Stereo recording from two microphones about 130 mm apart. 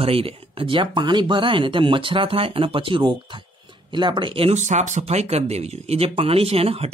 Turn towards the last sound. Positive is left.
turn(degrees=-50)  # may be behind; listen again after turning